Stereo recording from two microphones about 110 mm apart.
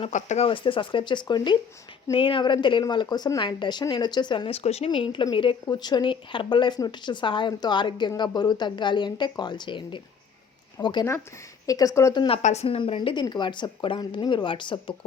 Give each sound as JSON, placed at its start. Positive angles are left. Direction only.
{"t": 0.0, "sound": "speech", "side_deg": 90}
{"t": 0.4, "sound": "speech", "side_deg": 50}
{"t": 4.4, "sound": "speech", "side_deg": 70}
{"t": 11.6, "sound": "speech", "side_deg": 30}
{"t": 12.3, "sound": "speech", "side_deg": 85}
{"t": 13.0, "sound": "speech", "side_deg": 40}